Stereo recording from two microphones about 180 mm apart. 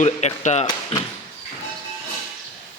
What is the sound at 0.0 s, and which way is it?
Speech, 40° left (ahead or behind).